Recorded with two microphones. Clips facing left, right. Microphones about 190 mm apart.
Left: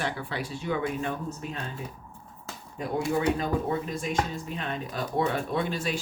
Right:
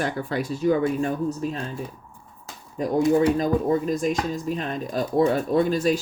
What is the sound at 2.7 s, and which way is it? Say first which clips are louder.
Speech: right 8 dB; 40° right (ahead or behind).